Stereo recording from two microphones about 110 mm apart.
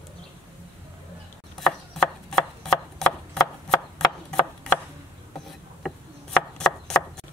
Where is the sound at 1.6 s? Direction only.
5° left (ahead or behind).